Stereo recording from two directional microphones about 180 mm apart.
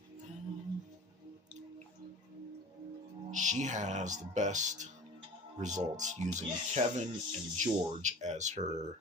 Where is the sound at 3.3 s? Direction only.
45° right (ahead or behind).